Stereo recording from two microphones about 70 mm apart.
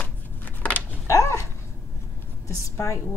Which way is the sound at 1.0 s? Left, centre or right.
Left.